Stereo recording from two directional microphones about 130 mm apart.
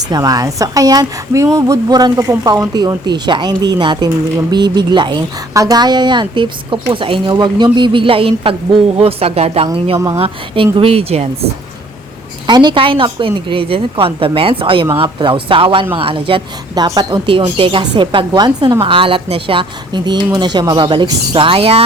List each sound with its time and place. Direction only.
0.1 s a woman's voice: 30° right (ahead or behind); by 11.3 s 50° right (ahead or behind)
12.5 s a woman's voice: 35° right (ahead or behind)